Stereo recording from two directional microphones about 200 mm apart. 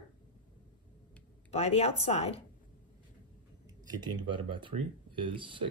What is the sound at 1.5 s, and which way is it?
Speech, 35° left (ahead or behind).